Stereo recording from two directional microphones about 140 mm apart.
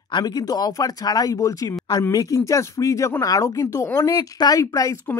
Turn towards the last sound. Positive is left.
turn(degrees=25)  # may be behind; listen again after turning